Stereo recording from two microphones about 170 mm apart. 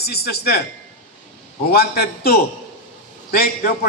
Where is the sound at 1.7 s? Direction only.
65° left (ahead or behind).